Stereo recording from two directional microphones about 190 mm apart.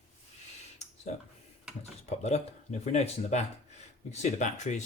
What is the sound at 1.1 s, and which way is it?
Speech, 40° left (ahead or behind).